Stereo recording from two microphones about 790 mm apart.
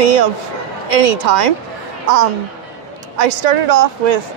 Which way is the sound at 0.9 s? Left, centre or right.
Right.